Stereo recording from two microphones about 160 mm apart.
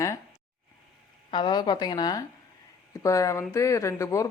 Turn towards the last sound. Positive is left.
turn(degrees=20)  # may be behind; listen again after turning